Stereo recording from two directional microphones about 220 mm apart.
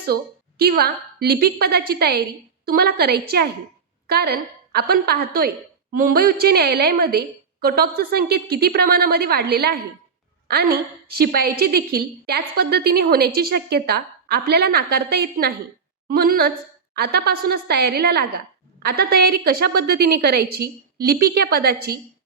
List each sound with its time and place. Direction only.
0.6 s a woman's voice: 45° right (ahead or behind)